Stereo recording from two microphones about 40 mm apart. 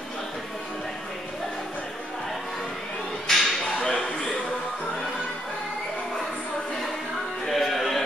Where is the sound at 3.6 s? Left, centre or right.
Centre.